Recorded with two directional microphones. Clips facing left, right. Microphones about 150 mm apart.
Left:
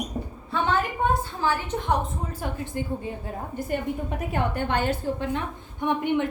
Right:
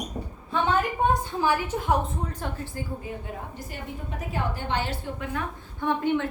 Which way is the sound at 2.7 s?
20° left (ahead or behind).